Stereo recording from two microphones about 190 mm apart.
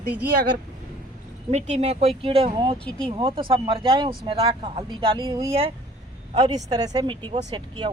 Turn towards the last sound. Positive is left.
turn(degrees=-25)  # may be behind; listen again after turning